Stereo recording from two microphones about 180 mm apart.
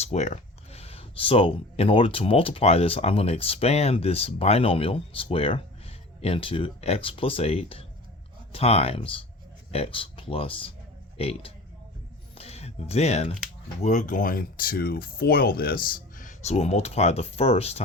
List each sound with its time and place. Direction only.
0.0 s speech: 40° left (ahead or behind)
12.3 s music: 35° left (ahead or behind)
13.8 s speech: 45° left (ahead or behind)